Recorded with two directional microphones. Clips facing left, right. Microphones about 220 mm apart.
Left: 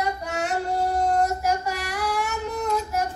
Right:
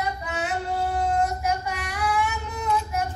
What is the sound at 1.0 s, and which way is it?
Female singing, 45° left (ahead or behind).